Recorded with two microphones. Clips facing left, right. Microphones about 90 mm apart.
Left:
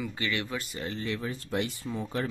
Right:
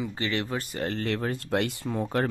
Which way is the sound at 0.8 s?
55° right (ahead or behind).